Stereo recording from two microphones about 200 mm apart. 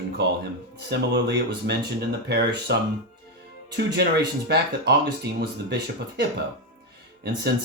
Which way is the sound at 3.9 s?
55° right (ahead or behind).